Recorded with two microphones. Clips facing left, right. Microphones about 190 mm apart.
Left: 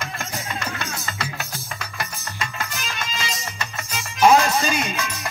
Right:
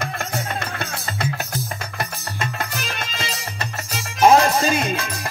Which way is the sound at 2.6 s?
55° right (ahead or behind).